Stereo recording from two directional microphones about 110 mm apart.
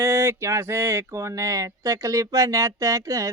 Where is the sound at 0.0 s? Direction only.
25° right (ahead or behind).